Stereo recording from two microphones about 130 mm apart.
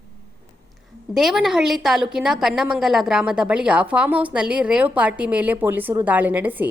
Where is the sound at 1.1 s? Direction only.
5° right (ahead or behind).